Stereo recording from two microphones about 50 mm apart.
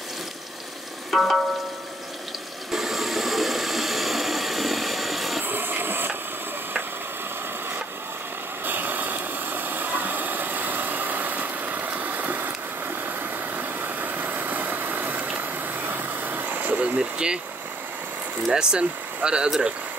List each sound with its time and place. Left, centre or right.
1.1 s music: centre
2.7 s engine: centre
5.4 s vehicle: right
8.6 s vehicle: right; by 17.4 s centre
18.5 s speech: centre